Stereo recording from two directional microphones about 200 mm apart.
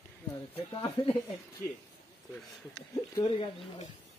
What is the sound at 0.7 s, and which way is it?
Speech, 25° left (ahead or behind).